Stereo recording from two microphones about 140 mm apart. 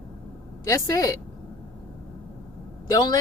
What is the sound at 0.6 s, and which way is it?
Speech, 20° left (ahead or behind).